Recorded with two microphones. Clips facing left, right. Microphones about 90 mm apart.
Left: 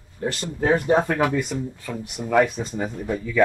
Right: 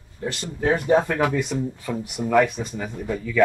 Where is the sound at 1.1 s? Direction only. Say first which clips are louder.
Even; 15° left (ahead or behind).